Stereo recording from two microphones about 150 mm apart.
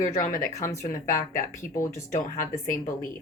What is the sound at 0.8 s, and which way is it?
Speech, 20° left (ahead or behind).